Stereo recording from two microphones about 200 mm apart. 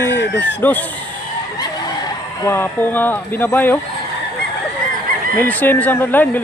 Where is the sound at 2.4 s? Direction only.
10° left (ahead or behind).